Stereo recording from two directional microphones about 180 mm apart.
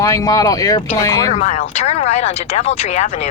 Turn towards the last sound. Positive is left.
turn(degrees=35)  # may be behind; listen again after turning